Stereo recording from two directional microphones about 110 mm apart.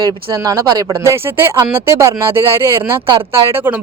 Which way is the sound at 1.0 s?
20° right (ahead or behind).